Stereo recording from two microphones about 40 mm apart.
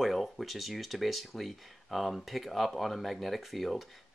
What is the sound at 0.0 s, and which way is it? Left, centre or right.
Speech, centre.